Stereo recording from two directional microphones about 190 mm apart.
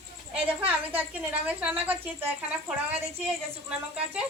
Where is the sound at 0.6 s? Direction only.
10° right (ahead or behind).